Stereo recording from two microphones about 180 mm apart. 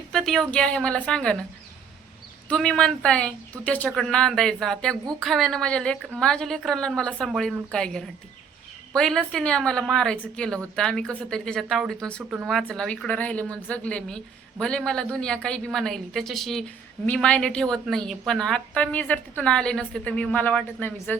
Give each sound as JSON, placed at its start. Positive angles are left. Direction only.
{"t": 0.1, "sound": "a woman's voice", "side_deg": 0}
{"t": 2.5, "sound": "a woman's voice", "side_deg": 5}